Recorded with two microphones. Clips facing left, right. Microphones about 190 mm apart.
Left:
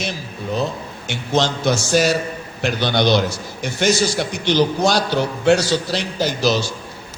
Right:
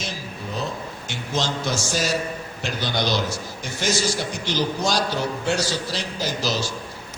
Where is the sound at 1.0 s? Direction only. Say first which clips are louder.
Left 7 dB; 65° left (ahead or behind).